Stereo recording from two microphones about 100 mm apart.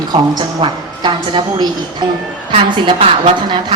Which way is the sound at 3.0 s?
80° right.